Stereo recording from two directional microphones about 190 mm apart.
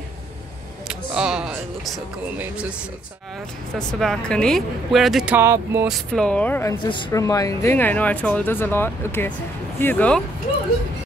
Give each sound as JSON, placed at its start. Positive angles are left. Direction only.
{"t": 0.8, "sound": "a sound", "side_deg": -5}
{"t": 2.3, "sound": "speech", "side_deg": -5}
{"t": 3.7, "sound": "speech", "side_deg": 5}
{"t": 5.9, "sound": "speech", "side_deg": 0}
{"t": 6.8, "sound": "speech", "side_deg": 25}